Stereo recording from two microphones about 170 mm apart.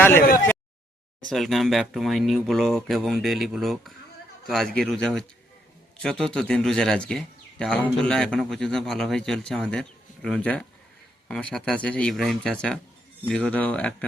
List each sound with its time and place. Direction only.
0.2 s speech: 55° left (ahead or behind)
1.3 s speech: centre (ahead or behind)